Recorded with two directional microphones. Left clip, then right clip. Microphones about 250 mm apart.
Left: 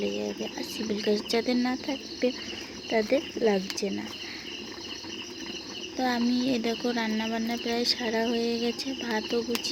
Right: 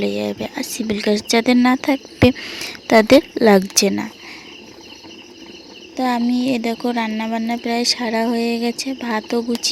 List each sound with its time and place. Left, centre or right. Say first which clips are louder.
0.0 s speech: right 9 dB; right
6.0 s speech: right 8 dB; right